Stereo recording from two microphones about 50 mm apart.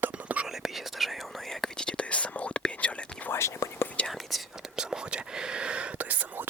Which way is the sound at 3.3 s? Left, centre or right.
Left.